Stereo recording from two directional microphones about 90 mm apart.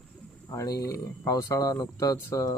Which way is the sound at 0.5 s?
35° left (ahead or behind).